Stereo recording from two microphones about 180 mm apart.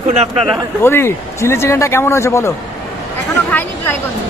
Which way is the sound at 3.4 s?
10° left (ahead or behind).